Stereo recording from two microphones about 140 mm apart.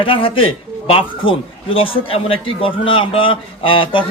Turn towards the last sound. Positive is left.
turn(degrees=35)  # may be behind; listen again after turning